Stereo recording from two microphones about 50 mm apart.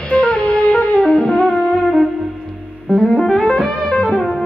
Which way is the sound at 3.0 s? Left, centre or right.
Centre.